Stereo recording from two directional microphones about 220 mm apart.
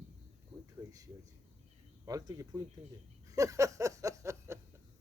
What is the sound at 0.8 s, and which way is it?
Speech, 15° right (ahead or behind).